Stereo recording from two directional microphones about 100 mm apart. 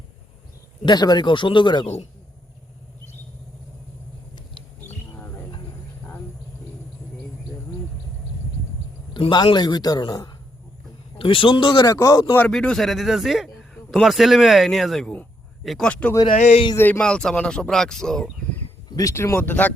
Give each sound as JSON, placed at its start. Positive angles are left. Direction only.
{"t": 0.9, "sound": "speech", "side_deg": 45}
{"t": 9.3, "sound": "speech", "side_deg": 50}
{"t": 11.2, "sound": "speech", "side_deg": 60}
{"t": 11.9, "sound": "speech", "side_deg": 35}
{"t": 12.4, "sound": "a man's voice", "side_deg": 10}
{"t": 15.9, "sound": "speech", "side_deg": 10}
{"t": 17.0, "sound": "speech", "side_deg": 10}
{"t": 18.9, "sound": "speech", "side_deg": 35}
{"t": 19.4, "sound": "speech", "side_deg": 15}